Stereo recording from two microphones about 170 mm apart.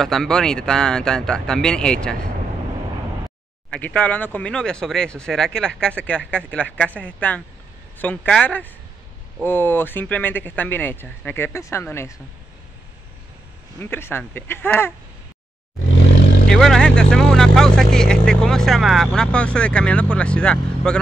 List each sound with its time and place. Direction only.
0.0 s speech: centre (ahead or behind)
3.7 s speech: 5° left (ahead or behind)
13.7 s speech: 15° left (ahead or behind)
16.3 s vehicle: 75° left (ahead or behind)
16.5 s speech: centre (ahead or behind)